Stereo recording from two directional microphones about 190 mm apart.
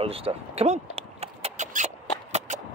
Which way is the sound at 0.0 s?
30° right (ahead or behind).